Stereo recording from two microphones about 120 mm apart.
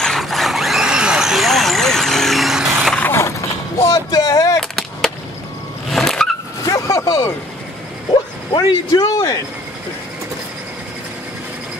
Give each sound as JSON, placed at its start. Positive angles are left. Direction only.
{"t": 0.0, "sound": "vehicle", "side_deg": 0}
{"t": 3.0, "sound": "vehicle", "side_deg": 20}
{"t": 4.6, "sound": "a sound", "side_deg": 5}
{"t": 5.9, "sound": "vehicle", "side_deg": 0}
{"t": 6.6, "sound": "a sound", "side_deg": 30}
{"t": 8.1, "sound": "speech", "side_deg": 35}